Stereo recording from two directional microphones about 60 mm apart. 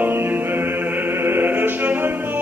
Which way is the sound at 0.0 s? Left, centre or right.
Right.